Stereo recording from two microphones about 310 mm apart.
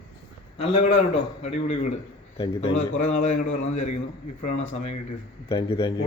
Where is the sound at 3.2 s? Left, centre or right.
Left.